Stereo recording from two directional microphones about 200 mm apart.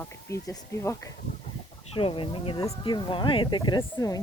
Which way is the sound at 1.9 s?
25° left (ahead or behind).